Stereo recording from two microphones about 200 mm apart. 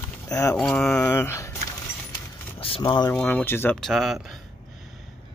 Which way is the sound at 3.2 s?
10° left (ahead or behind).